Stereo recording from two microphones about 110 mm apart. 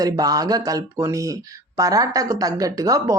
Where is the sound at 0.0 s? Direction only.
35° right (ahead or behind).